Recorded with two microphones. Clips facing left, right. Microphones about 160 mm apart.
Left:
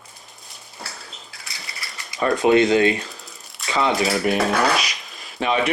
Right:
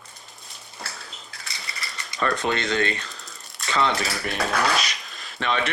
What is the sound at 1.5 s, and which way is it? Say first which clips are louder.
Typewriter: right 1 dB; centre (ahead or behind).